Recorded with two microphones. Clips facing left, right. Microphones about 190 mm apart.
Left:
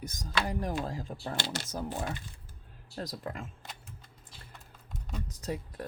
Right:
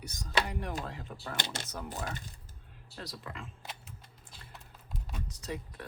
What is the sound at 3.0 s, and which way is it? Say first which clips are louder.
Speech: left 6 dB; 45° left (ahead or behind).